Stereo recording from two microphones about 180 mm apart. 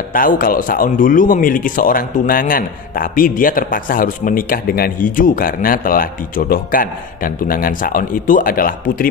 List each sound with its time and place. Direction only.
0.1 s speech: 50° left (ahead or behind)